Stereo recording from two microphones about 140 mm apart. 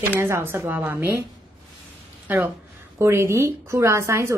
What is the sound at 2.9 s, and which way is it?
Speech, 20° right (ahead or behind).